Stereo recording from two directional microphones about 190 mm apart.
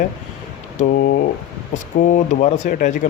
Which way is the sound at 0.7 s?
45° left (ahead or behind).